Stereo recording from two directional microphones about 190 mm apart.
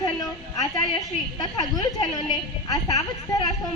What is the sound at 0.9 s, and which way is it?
Speech, 20° left (ahead or behind).